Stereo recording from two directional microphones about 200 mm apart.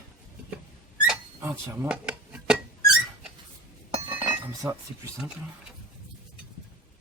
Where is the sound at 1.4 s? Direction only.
10° right (ahead or behind).